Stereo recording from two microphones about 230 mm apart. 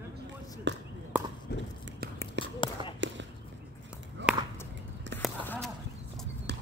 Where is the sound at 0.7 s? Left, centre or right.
Right.